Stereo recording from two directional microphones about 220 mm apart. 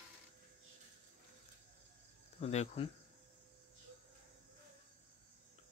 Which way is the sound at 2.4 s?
30° left (ahead or behind).